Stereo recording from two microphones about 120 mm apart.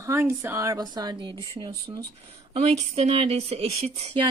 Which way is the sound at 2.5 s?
55° right (ahead or behind).